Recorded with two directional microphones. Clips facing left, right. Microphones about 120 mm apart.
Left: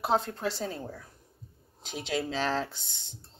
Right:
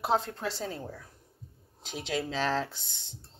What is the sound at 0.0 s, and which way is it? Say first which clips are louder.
Speech: left 1 dB; centre (ahead or behind).